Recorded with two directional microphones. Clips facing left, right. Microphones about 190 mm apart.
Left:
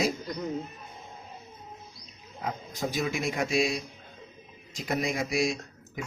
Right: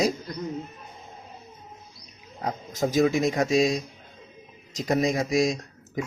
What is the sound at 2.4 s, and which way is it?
Speech, 45° right (ahead or behind).